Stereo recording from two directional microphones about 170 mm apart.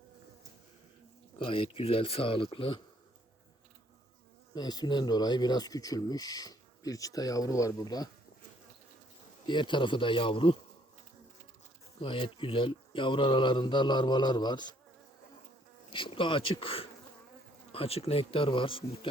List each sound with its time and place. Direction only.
1.4 s speech: 30° left (ahead or behind)
4.5 s speech: 25° left (ahead or behind)
9.5 s speech: 30° left (ahead or behind)
11.9 s speech: 30° left (ahead or behind)
15.9 s speech: 30° left (ahead or behind)